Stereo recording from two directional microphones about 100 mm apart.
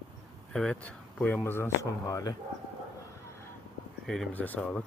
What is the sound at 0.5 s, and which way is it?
Speech, 10° left (ahead or behind).